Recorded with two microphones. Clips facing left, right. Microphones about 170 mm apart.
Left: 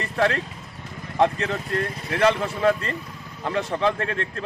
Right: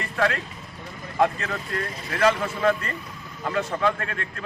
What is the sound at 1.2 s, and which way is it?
Speech, 20° left (ahead or behind).